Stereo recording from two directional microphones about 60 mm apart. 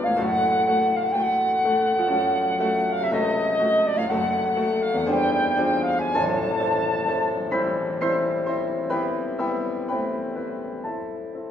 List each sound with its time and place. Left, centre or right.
0.1 s music: centre
5.0 s music: centre
5.7 s music: left
6.7 s music: centre